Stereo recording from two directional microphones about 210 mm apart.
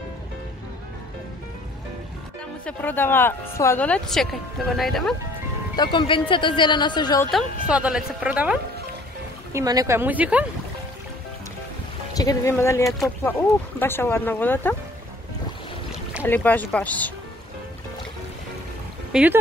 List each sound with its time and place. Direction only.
2.6 s a woman's voice: 10° left (ahead or behind)
5.8 s speech: 20° left (ahead or behind)
7.2 s a woman's voice: centre (ahead or behind)
12.1 s a woman's voice: 15° left (ahead or behind)
16.3 s a woman's voice: 10° left (ahead or behind)
19.1 s a woman's voice: 5° right (ahead or behind)